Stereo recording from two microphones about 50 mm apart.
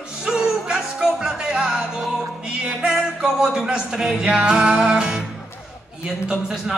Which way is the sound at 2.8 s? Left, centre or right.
Centre.